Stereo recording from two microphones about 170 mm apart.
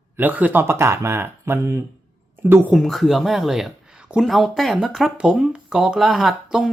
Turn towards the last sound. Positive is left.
turn(degrees=-5)  # may be behind; listen again after turning